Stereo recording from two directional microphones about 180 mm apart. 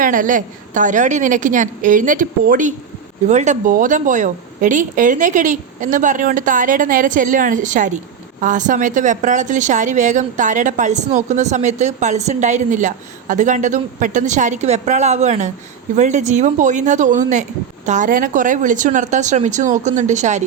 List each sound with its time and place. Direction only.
0.0 s a woman's voice: 50° right (ahead or behind)